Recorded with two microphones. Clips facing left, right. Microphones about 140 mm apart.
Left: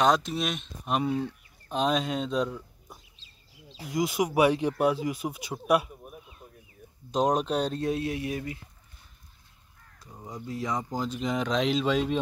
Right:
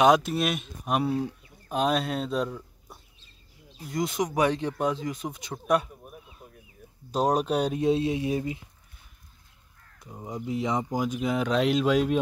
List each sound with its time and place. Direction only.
0.0 s speech: 10° right (ahead or behind)
7.1 s speech: 5° right (ahead or behind)
7.9 s speech: 20° right (ahead or behind)
9.9 s speech: 20° right (ahead or behind)